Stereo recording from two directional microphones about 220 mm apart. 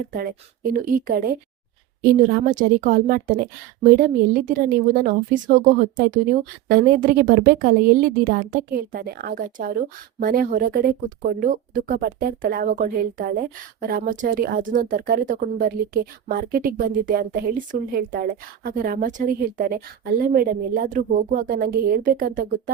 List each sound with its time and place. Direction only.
0.1 s speech: 40° right (ahead or behind)